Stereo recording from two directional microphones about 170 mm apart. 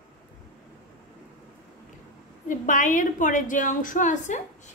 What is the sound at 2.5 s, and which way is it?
A woman's voice, 50° left (ahead or behind).